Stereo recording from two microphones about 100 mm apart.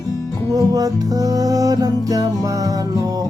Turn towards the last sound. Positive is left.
turn(degrees=-35)  # may be behind; listen again after turning